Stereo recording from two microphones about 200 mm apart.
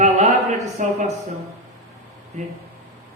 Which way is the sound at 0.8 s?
35° right (ahead or behind).